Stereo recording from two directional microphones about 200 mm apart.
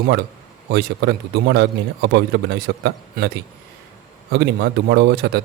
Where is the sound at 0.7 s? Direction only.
55° right (ahead or behind).